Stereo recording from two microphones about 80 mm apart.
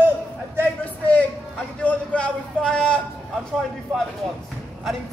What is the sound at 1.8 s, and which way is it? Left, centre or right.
A man's voice, centre.